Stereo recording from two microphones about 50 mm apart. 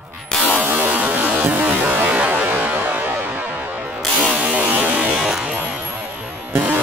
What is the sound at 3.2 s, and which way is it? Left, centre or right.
Music, right.